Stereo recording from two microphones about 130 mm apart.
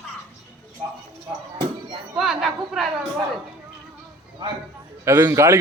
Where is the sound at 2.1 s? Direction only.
Centre (ahead or behind).